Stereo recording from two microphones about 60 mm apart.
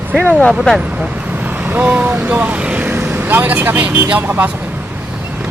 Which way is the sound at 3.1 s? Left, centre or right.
Right.